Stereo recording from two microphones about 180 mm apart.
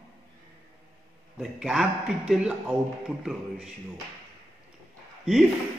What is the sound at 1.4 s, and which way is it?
A man's voice, 5° right (ahead or behind).